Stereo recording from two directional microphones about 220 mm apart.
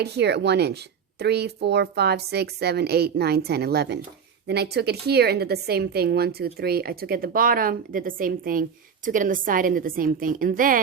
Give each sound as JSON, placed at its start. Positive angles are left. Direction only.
{"t": 0.0, "sound": "a woman's voice", "side_deg": -50}